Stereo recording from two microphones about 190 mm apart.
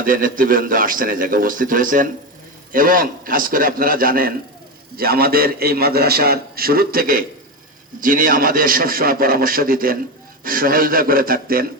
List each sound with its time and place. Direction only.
0.0 s a man's voice: 45° right (ahead or behind)